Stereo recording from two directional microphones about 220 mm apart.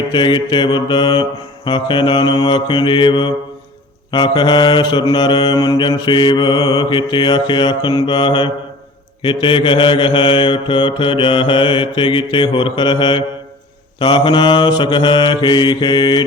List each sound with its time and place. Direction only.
0.1 s mantra: 20° left (ahead or behind)